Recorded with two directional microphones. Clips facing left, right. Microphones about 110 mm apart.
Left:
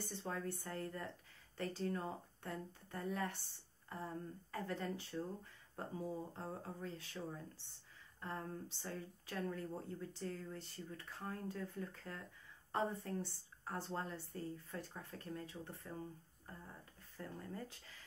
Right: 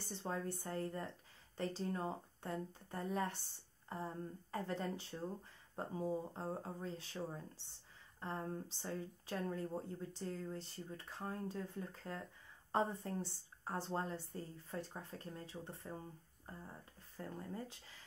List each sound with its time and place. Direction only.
0.0 s speech: 25° right (ahead or behind)
17.2 s speech: 25° right (ahead or behind)